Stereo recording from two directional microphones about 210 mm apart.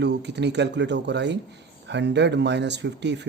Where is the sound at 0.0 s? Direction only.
55° right (ahead or behind).